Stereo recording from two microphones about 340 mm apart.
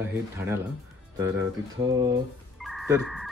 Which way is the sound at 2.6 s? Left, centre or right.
Centre.